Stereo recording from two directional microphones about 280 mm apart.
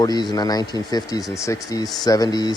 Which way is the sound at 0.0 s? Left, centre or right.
Centre.